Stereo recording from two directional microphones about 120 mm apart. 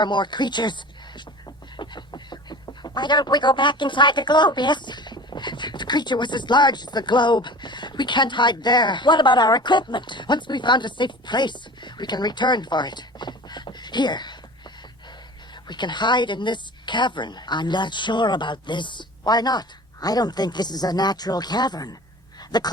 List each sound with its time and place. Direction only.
0.0 s speech: 40° left (ahead or behind)
15.6 s a woman's voice: 40° left (ahead or behind)